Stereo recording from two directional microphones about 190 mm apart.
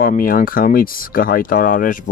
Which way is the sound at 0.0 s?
50° left (ahead or behind).